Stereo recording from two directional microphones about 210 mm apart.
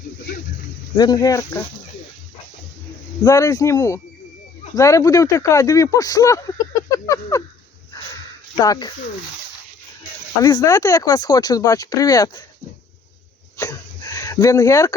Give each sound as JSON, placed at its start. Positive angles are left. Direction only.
{"t": 0.9, "sound": "speech", "side_deg": 20}
{"t": 3.2, "sound": "speech", "side_deg": 15}
{"t": 8.5, "sound": "speech", "side_deg": 20}
{"t": 10.4, "sound": "speech", "side_deg": 15}
{"t": 13.6, "sound": "a sound", "side_deg": 15}